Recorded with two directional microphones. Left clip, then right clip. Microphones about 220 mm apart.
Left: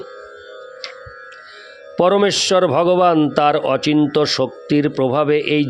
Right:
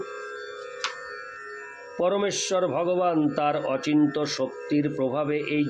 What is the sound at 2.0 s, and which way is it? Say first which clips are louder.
A man's voice: left 10 dB; 50° left (ahead or behind).